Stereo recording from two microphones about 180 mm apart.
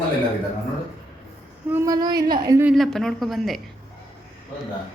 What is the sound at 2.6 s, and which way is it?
Speech, centre (ahead or behind).